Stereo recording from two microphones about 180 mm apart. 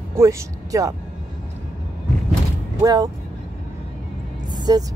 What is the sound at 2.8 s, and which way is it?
Speech, 20° right (ahead or behind).